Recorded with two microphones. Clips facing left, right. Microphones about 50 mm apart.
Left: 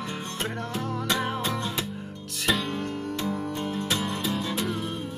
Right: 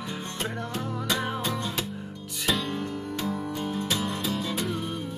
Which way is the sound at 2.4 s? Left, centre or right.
Centre.